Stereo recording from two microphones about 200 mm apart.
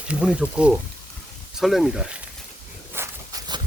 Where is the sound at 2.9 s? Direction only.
15° right (ahead or behind).